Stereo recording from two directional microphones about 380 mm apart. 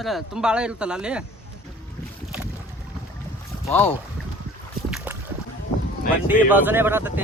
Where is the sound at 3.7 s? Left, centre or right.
Centre.